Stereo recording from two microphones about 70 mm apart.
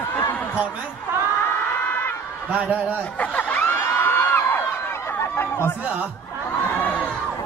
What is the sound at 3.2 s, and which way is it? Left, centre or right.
Snicker, left.